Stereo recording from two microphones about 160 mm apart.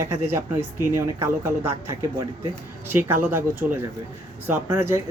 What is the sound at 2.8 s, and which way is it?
Speech, 15° right (ahead or behind).